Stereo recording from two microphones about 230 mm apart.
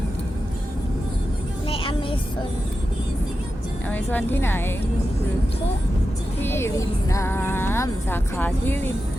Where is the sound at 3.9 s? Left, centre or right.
Centre.